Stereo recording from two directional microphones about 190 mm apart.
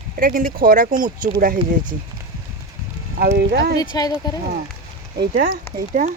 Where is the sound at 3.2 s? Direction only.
55° right (ahead or behind).